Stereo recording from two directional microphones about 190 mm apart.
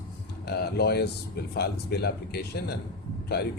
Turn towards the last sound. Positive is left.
turn(degrees=60)  # may be behind; listen again after turning